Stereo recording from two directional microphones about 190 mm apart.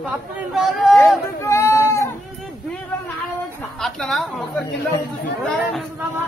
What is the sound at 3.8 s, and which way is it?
Speech, centre (ahead or behind).